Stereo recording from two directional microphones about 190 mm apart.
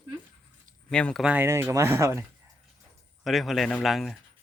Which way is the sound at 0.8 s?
5° left (ahead or behind).